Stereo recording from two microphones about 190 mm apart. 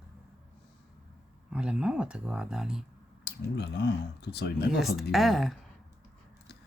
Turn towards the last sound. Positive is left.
turn(degrees=0)  # may be behind; listen again after turning